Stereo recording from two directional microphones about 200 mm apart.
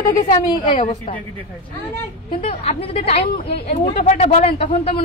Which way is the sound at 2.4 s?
30° left (ahead or behind).